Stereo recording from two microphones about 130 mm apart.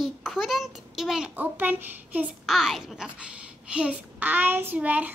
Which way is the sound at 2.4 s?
Centre (ahead or behind).